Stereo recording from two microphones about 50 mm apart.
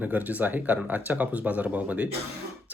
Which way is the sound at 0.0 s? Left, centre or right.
Right.